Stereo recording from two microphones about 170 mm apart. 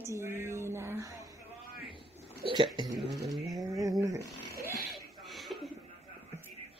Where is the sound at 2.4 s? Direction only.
30° right (ahead or behind).